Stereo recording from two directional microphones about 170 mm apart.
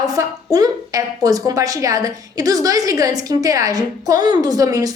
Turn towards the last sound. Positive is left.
turn(degrees=-20)  # may be behind; listen again after turning